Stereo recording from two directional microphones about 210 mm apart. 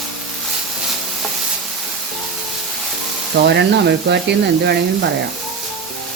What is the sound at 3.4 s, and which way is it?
Speech, 55° right (ahead or behind).